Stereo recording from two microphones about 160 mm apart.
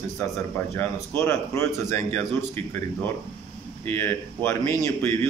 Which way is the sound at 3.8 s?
15° left (ahead or behind).